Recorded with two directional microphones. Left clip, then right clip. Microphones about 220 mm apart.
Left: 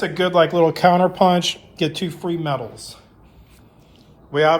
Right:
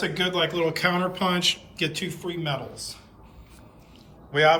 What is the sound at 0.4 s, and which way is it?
Speech, 65° left (ahead or behind).